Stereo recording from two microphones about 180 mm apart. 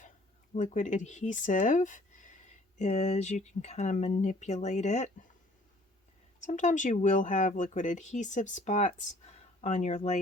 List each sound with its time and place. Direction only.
0.5 s speech: 45° left (ahead or behind)
6.4 s speech: 45° left (ahead or behind)